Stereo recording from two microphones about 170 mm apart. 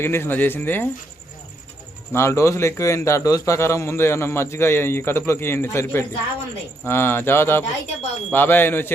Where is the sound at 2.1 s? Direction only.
15° left (ahead or behind).